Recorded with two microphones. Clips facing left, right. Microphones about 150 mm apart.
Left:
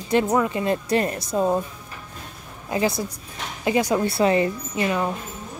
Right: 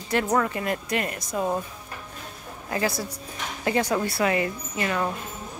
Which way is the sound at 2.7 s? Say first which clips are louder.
Left 4 dB; 20° left (ahead or behind).